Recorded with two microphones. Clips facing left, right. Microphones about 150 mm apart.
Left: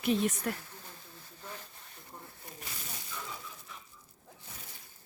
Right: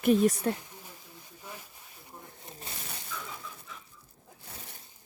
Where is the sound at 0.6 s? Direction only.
15° right (ahead or behind).